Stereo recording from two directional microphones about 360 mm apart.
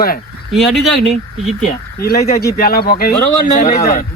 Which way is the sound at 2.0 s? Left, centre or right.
Left.